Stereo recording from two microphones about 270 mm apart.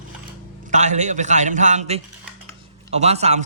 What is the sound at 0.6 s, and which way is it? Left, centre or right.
A man's voice, right.